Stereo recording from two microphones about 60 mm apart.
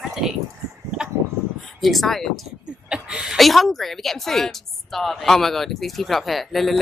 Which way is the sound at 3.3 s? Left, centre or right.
Centre.